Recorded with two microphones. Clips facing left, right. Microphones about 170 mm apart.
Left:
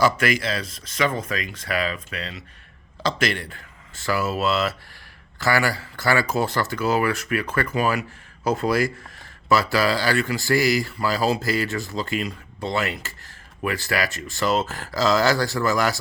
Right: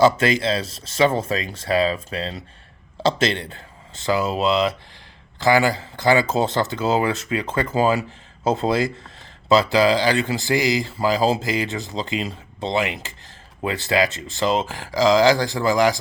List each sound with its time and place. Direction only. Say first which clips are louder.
0.0 s speech: right 4 dB; 25° right (ahead or behind)